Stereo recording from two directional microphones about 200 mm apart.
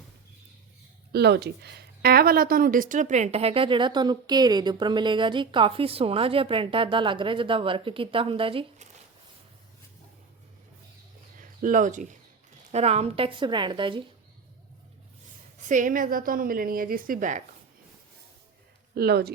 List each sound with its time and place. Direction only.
1.1 s speech: 55° right (ahead or behind); by 8.9 s 25° right (ahead or behind)
11.3 s speech: 40° right (ahead or behind); by 14.0 s 25° right (ahead or behind)
15.7 s a woman's voice: 40° right (ahead or behind)
18.9 s a woman's voice: 50° right (ahead or behind)